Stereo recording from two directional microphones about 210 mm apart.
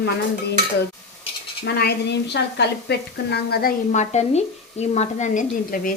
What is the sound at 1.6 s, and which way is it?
Sizzle, 50° left (ahead or behind).